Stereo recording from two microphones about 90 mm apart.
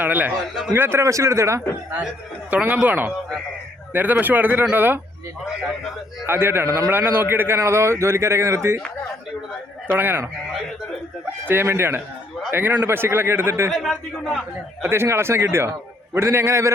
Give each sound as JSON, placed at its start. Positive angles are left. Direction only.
{"t": 0.0, "sound": "a man's voice", "side_deg": -20}
{"t": 2.5, "sound": "a man's voice", "side_deg": -15}
{"t": 6.2, "sound": "a man's voice", "side_deg": -25}
{"t": 9.8, "sound": "speech", "side_deg": -25}
{"t": 11.4, "sound": "a man's voice", "side_deg": -25}
{"t": 13.7, "sound": "a man's voice", "side_deg": 5}
{"t": 14.8, "sound": "a man's voice", "side_deg": -25}